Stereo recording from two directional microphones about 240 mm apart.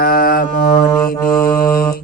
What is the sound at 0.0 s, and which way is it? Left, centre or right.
Mantra, left.